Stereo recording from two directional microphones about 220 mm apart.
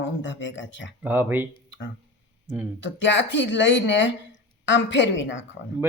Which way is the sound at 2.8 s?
55° left (ahead or behind).